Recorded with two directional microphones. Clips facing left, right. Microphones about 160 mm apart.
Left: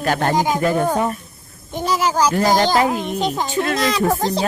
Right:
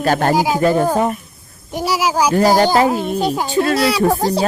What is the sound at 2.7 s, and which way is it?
Speech, 30° right (ahead or behind).